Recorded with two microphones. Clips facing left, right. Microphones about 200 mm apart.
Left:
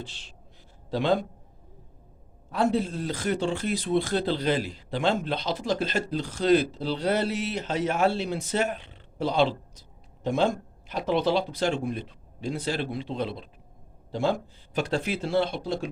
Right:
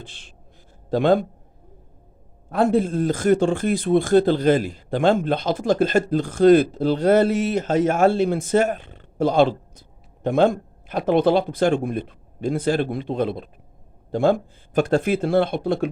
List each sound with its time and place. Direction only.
0.0 s a man's voice: 55° right (ahead or behind)
2.5 s speech: 55° right (ahead or behind)